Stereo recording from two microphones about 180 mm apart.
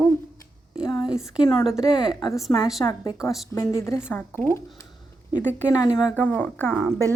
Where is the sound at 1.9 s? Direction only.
25° left (ahead or behind).